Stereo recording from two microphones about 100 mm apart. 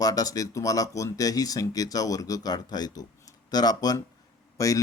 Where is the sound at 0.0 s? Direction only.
35° left (ahead or behind).